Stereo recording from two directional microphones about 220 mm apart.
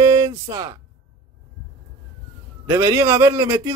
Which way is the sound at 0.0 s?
15° right (ahead or behind).